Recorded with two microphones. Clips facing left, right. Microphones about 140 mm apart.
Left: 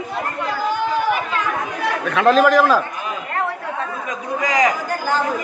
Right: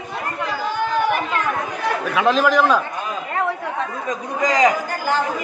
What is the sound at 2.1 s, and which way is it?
Speech, centre (ahead or behind).